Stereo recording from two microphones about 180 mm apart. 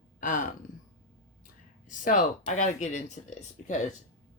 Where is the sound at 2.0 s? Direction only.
45° left (ahead or behind).